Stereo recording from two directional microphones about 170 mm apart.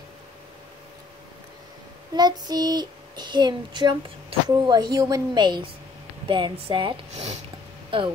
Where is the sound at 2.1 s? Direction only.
25° right (ahead or behind).